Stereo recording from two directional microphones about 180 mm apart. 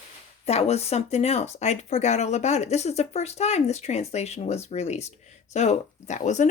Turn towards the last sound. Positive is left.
turn(degrees=40)  # may be behind; listen again after turning